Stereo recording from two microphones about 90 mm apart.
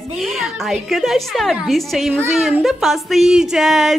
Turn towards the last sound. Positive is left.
turn(degrees=-5)  # may be behind; listen again after turning